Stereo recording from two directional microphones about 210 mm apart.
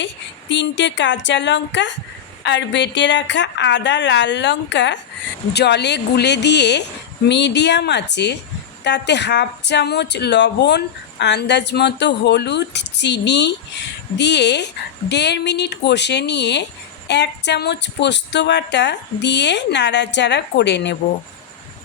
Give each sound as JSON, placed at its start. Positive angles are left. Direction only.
{"t": 0.0, "sound": "speech", "side_deg": 60}